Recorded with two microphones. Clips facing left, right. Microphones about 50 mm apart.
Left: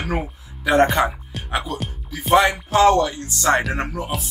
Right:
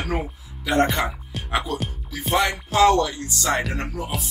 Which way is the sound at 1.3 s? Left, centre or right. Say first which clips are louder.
Even; centre.